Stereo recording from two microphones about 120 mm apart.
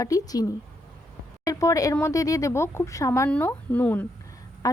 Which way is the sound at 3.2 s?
10° left (ahead or behind).